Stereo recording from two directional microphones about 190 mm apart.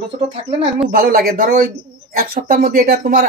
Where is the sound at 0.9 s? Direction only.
55° right (ahead or behind).